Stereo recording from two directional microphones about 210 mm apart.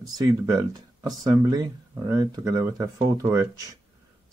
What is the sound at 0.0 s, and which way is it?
Speech, 20° right (ahead or behind).